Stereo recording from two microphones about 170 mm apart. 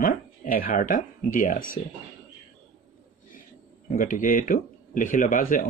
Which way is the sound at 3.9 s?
50° left (ahead or behind).